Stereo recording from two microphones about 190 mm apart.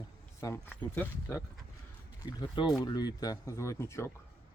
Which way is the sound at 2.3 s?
20° left (ahead or behind).